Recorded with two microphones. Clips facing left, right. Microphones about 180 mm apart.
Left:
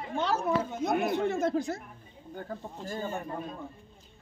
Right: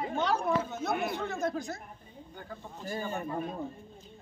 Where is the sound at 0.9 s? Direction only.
50° left (ahead or behind).